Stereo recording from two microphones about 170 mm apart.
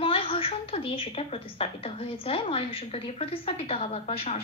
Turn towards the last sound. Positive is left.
turn(degrees=40)  # may be behind; listen again after turning